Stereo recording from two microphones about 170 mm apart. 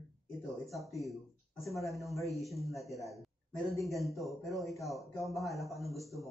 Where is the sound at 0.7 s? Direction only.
Centre (ahead or behind).